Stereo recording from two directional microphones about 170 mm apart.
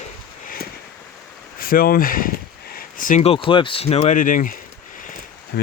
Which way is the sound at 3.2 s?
30° left (ahead or behind).